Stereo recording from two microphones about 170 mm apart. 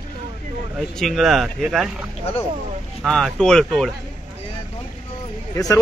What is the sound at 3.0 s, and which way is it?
Speech, 5° left (ahead or behind).